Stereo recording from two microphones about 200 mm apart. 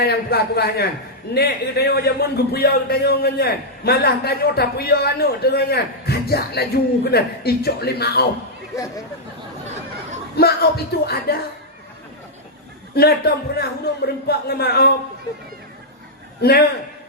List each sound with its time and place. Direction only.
0.0 s a man's voice: 50° left (ahead or behind)
10.3 s a man's voice: 50° left (ahead or behind)
13.0 s a man's voice: 50° left (ahead or behind)
16.4 s a man's voice: 50° left (ahead or behind)